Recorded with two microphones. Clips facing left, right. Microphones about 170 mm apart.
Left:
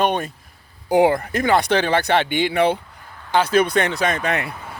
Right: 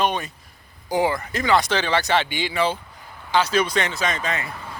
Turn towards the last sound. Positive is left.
turn(degrees=65)  # may be behind; listen again after turning